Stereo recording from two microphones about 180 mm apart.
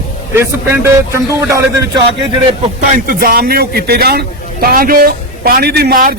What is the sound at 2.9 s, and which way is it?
A man's voice, 50° right (ahead or behind).